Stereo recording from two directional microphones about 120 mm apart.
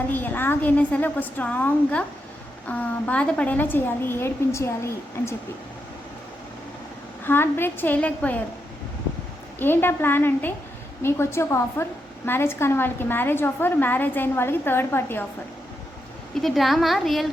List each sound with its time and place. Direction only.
0.1 s a woman's voice: 15° left (ahead or behind)
7.3 s a woman's voice: 20° left (ahead or behind)
9.6 s a woman's voice: 15° left (ahead or behind)
16.4 s a woman's voice: centre (ahead or behind)